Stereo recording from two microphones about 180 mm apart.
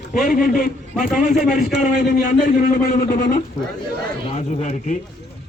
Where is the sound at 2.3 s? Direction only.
45° left (ahead or behind).